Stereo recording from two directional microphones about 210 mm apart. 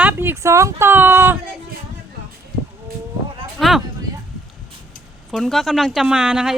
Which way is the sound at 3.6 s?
Centre (ahead or behind).